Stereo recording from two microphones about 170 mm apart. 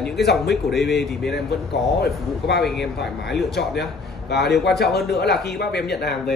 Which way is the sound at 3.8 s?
75° left (ahead or behind).